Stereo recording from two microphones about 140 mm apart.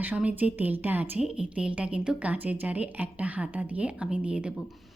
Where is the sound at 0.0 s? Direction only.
10° right (ahead or behind).